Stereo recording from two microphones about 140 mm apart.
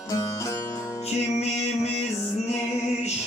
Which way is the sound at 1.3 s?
50° left (ahead or behind).